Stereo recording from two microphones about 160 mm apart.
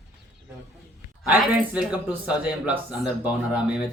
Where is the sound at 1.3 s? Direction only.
10° right (ahead or behind).